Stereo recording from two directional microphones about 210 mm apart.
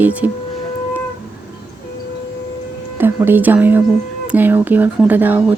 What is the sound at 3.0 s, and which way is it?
Speech, 10° right (ahead or behind).